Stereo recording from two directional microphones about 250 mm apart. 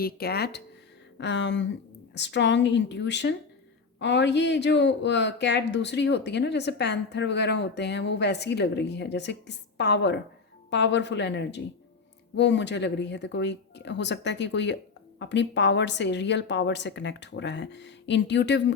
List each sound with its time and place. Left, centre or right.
0.0 s speech: left